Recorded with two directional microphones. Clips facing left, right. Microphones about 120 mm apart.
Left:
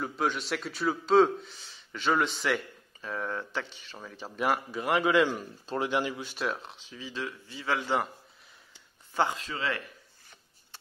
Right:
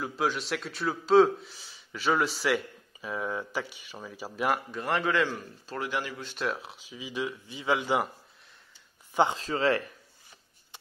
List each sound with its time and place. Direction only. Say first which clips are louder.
0.0 s a man's voice: right 1 dB; centre (ahead or behind); by 6.2 s 20° left (ahead or behind)
6.3 s speech: right 1 dB; centre (ahead or behind)
9.1 s speech: right 3 dB; 20° right (ahead or behind)
9.4 s speech: right 7 dB; 35° right (ahead or behind)